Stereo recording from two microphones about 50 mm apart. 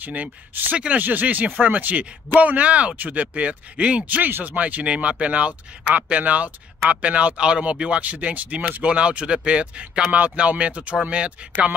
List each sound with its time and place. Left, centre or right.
0.0 s speech: right
1.0 s speech: right